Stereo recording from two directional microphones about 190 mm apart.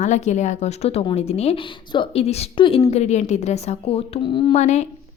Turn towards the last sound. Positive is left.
turn(degrees=35)  # may be behind; listen again after turning